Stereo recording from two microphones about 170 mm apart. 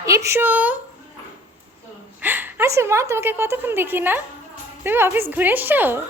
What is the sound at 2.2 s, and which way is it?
A woman's voice, 10° right (ahead or behind).